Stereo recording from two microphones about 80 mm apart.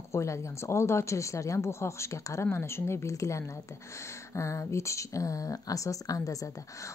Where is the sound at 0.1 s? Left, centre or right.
Left.